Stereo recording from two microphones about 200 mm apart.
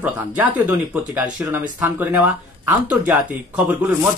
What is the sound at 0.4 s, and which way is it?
Speech, 10° right (ahead or behind).